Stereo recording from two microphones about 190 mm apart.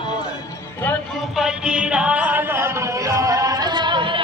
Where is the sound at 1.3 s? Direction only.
5° right (ahead or behind).